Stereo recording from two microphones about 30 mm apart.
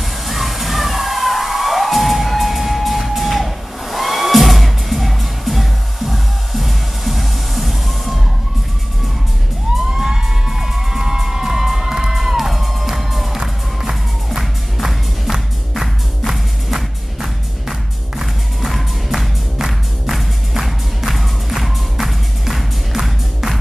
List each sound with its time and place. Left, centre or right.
0.0 s music: centre
9.9 s music: centre
13.4 s music: centre